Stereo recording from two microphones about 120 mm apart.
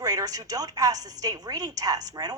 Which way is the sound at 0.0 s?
30° right (ahead or behind).